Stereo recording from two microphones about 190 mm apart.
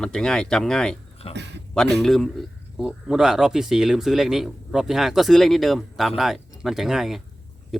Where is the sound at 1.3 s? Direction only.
65° right (ahead or behind).